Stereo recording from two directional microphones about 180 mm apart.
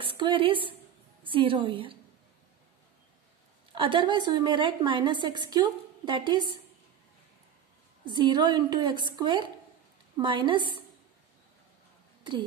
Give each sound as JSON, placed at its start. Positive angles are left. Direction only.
{"t": 0.0, "sound": "a woman's voice", "side_deg": -30}
{"t": 3.7, "sound": "a woman's voice", "side_deg": -25}
{"t": 8.0, "sound": "a woman's voice", "side_deg": -25}
{"t": 12.2, "sound": "speech", "side_deg": -25}